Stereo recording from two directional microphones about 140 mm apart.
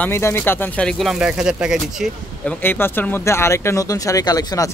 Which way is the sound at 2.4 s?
15° left (ahead or behind).